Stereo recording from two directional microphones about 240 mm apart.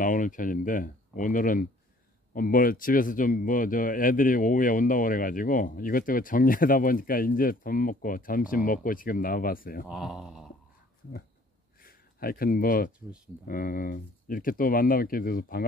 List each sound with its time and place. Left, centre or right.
0.0 s speech: left
9.8 s speech: centre
11.8 s speech: left